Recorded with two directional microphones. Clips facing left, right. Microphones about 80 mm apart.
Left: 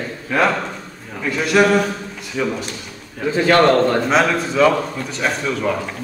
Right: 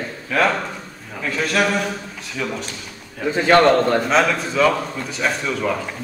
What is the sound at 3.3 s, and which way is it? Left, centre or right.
Speech, right.